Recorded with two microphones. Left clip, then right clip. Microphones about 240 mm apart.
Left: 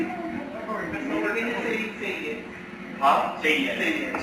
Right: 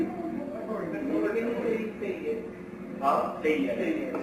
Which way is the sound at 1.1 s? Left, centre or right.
Centre.